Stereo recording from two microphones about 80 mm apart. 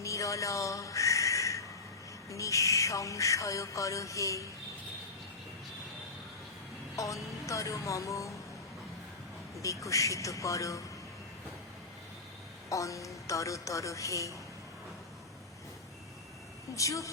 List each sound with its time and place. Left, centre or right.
0.0 s crow: left
2.3 s owl: left
6.9 s owl: left
9.6 s owl: left
12.6 s owl: left
16.7 s owl: left